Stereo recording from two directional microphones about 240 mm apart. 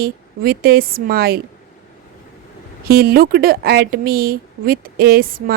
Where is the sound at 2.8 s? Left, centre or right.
Right.